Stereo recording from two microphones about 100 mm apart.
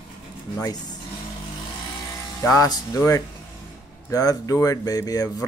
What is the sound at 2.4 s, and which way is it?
Speech, 35° left (ahead or behind).